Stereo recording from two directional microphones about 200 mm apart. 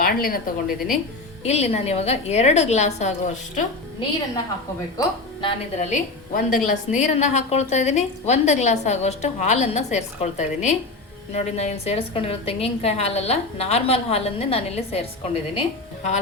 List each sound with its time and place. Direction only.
0.0 s a woman's voice: 45° left (ahead or behind)
1.5 s a woman's voice: 30° left (ahead or behind)
4.9 s a woman's voice: 25° left (ahead or behind)
5.9 s a woman's voice: 40° left (ahead or behind)